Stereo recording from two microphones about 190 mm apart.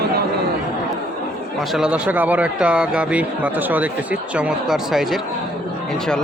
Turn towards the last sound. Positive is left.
turn(degrees=-5)  # may be behind; listen again after turning